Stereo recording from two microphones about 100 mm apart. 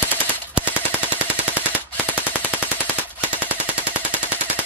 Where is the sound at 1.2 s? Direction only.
15° right (ahead or behind).